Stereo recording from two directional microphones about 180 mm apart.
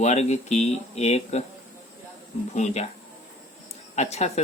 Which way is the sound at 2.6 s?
40° left (ahead or behind).